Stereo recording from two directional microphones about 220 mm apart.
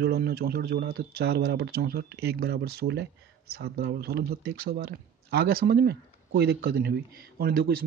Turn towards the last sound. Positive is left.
turn(degrees=-45)  # may be behind; listen again after turning